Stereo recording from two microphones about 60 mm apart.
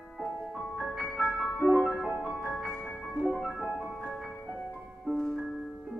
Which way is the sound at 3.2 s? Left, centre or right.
Centre.